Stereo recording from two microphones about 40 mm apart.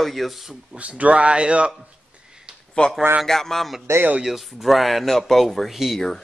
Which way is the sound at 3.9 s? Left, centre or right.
Right.